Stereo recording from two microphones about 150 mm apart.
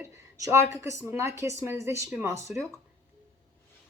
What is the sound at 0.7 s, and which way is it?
Speech, 20° right (ahead or behind).